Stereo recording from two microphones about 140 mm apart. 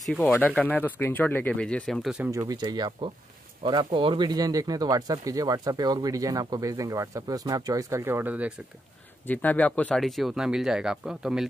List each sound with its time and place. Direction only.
0.0 s speech: centre (ahead or behind)
2.3 s speech: 25° right (ahead or behind); by 8.5 s 10° right (ahead or behind)
9.3 s speech: 10° left (ahead or behind); by 11.4 s 5° right (ahead or behind)